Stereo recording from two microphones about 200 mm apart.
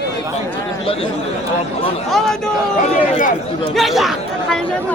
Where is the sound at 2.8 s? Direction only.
40° left (ahead or behind).